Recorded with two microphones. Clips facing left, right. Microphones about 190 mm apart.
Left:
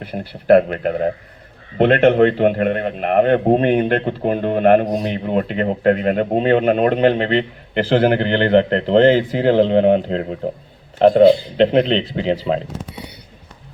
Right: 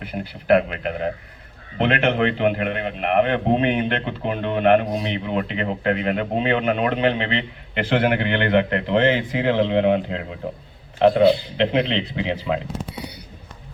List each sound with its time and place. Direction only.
0.0 s a man's voice: 40° left (ahead or behind)